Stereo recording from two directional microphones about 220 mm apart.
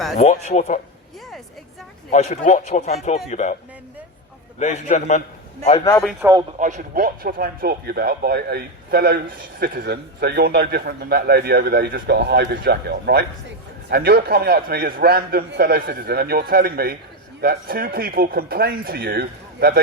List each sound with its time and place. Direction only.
0.2 s speech: 30° left (ahead or behind)
2.0 s speech: 35° left (ahead or behind)
4.6 s speech: 35° left (ahead or behind)
6.2 s speech: 10° right (ahead or behind)
6.6 s speech: 35° right (ahead or behind)